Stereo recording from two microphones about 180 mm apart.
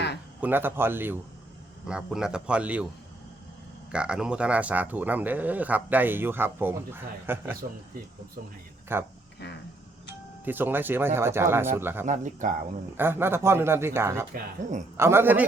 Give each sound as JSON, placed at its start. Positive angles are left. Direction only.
{"t": 0.4, "sound": "speech", "side_deg": -10}
{"t": 3.9, "sound": "speech", "side_deg": -5}
{"t": 8.9, "sound": "speech", "side_deg": -15}
{"t": 10.4, "sound": "speech", "side_deg": -10}
{"t": 12.0, "sound": "speech", "side_deg": -45}
{"t": 13.0, "sound": "speech", "side_deg": -10}
{"t": 14.3, "sound": "speech", "side_deg": -45}
{"t": 14.9, "sound": "speech", "side_deg": -15}